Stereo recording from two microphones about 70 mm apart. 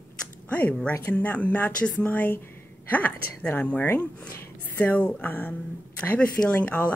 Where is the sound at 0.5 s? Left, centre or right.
Centre.